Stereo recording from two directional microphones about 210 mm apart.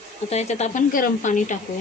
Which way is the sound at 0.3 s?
30° left (ahead or behind).